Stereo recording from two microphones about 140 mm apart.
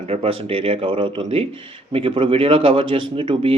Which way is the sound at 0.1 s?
45° right (ahead or behind).